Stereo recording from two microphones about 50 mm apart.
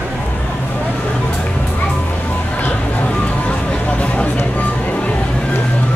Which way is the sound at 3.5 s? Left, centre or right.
Left.